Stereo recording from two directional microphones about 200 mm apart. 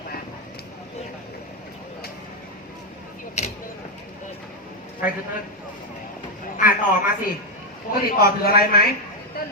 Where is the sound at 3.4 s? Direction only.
35° left (ahead or behind).